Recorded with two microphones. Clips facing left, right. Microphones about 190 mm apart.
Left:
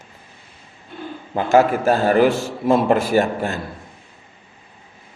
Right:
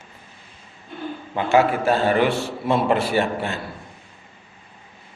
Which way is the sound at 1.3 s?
40° left (ahead or behind).